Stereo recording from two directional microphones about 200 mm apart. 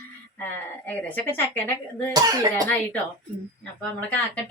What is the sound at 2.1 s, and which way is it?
Speech, 20° right (ahead or behind).